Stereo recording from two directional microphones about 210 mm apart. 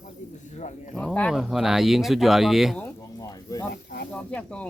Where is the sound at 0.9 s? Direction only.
5° left (ahead or behind).